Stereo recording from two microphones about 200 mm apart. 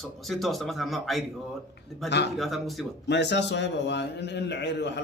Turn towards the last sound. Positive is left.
turn(degrees=60)  # may be behind; listen again after turning